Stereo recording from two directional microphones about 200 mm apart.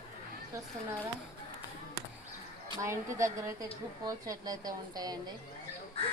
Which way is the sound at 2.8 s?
15° right (ahead or behind).